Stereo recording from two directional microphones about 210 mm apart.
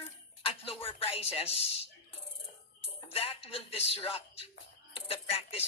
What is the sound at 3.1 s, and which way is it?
Speech, 30° left (ahead or behind).